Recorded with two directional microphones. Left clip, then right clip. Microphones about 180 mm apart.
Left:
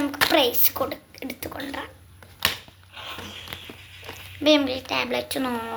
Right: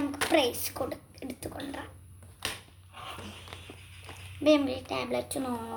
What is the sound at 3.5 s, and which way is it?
Walk, 30° left (ahead or behind).